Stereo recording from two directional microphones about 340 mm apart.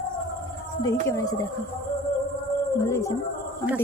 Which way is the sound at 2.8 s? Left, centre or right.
Centre.